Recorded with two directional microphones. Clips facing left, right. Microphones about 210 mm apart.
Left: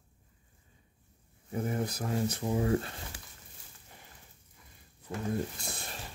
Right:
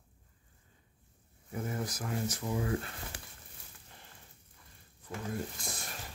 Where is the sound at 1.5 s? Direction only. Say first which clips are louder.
Left 4 dB; 25° left (ahead or behind).